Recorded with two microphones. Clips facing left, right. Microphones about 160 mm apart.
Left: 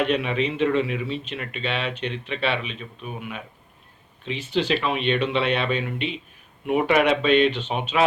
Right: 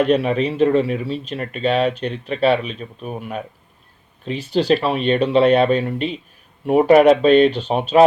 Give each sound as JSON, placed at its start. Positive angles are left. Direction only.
{"t": 0.0, "sound": "speech", "side_deg": -40}